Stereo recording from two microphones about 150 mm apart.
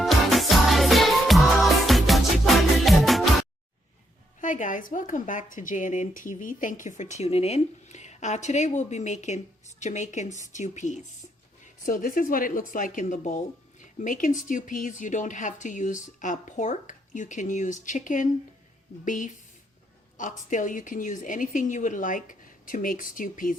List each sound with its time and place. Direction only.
0.0 s music: centre (ahead or behind)
4.4 s speech: 60° left (ahead or behind)
11.9 s speech: 65° left (ahead or behind)